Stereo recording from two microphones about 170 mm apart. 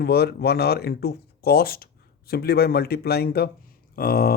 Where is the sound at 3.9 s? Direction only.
60° left (ahead or behind).